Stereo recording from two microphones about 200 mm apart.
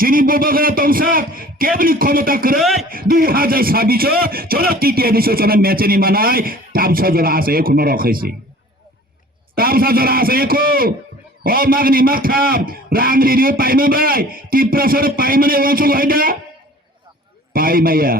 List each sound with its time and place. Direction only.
0.0 s speech: 45° right (ahead or behind)
2.6 s speech: centre (ahead or behind)
2.9 s speech: 45° right (ahead or behind)
9.6 s speech: 50° right (ahead or behind)
17.5 s speech: 45° right (ahead or behind)